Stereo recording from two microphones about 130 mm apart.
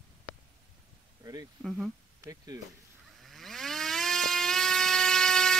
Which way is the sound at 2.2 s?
30° right (ahead or behind).